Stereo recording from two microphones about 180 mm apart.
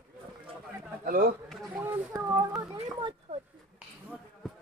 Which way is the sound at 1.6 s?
10° right (ahead or behind).